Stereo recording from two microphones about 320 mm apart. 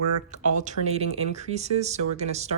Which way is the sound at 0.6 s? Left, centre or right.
Right.